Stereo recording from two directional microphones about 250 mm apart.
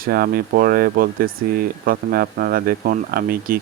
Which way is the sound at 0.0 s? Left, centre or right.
Right.